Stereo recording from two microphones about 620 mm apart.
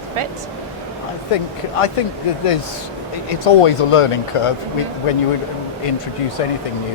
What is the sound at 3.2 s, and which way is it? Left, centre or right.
Speech, left.